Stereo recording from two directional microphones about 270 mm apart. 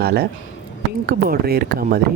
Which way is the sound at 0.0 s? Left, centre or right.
Right.